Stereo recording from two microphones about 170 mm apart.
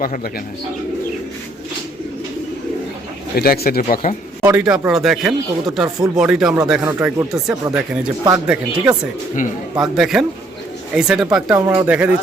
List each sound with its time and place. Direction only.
3.3 s speech: 60° left (ahead or behind)
4.4 s speech: 5° right (ahead or behind)
11.5 s speech: 15° right (ahead or behind)